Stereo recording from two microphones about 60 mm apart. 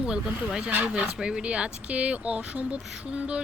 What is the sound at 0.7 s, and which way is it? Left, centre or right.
Speech, right.